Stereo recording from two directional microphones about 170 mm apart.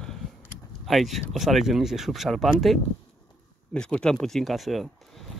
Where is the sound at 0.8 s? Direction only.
Centre (ahead or behind).